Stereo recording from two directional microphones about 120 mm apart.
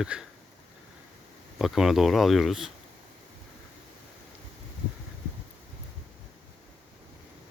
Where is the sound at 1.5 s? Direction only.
Centre (ahead or behind).